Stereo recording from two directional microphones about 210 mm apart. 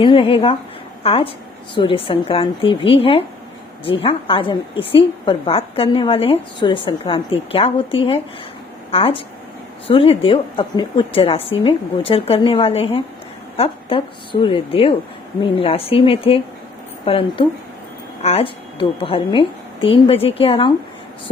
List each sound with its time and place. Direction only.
0.0 s a woman's voice: 25° left (ahead or behind)